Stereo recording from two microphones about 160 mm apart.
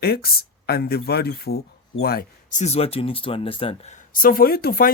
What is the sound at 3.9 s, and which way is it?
Speech, 60° left (ahead or behind).